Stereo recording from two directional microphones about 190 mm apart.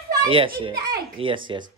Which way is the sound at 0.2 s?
25° right (ahead or behind).